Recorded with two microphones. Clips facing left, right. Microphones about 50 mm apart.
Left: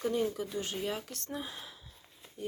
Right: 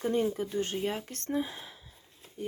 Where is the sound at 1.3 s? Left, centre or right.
Centre.